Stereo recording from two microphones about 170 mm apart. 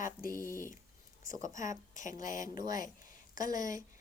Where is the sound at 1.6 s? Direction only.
45° left (ahead or behind).